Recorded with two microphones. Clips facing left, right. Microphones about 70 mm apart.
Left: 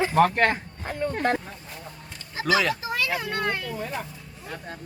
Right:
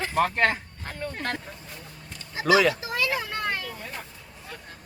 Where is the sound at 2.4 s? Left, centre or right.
Centre.